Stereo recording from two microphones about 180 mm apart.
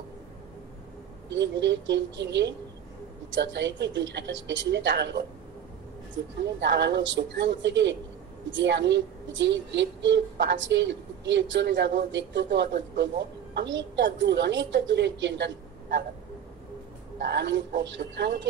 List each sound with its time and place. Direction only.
1.3 s a woman's voice: 85° right; by 5.2 s 70° right (ahead or behind)
6.4 s a woman's voice: 75° right (ahead or behind)
17.2 s a woman's voice: 70° right (ahead or behind)